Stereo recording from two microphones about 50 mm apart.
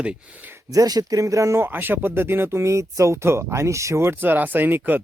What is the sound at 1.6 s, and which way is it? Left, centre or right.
Speech, right.